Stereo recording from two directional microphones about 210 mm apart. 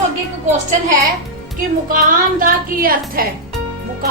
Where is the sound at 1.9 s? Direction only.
40° right (ahead or behind).